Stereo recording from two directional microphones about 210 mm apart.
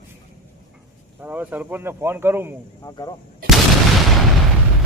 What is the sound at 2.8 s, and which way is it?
Speech, 20° left (ahead or behind).